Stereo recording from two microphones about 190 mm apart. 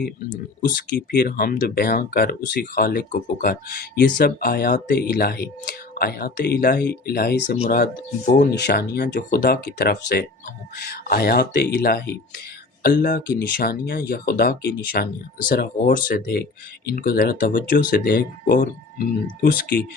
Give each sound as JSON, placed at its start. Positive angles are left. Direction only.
{"t": 1.1, "sound": "speech", "side_deg": 50}